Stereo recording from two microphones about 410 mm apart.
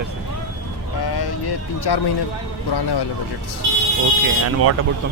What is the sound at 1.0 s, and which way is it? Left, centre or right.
Speech, left.